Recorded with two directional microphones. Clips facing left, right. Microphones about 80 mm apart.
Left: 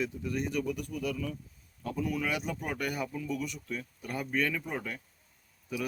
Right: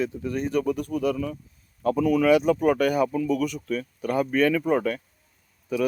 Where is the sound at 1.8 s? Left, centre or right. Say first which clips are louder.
Right 12 dB; right.